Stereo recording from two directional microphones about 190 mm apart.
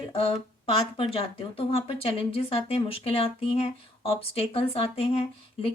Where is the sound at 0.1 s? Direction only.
30° left (ahead or behind).